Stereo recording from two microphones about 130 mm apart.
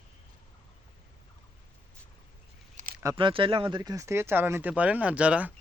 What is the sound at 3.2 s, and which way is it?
Speech, 40° right (ahead or behind).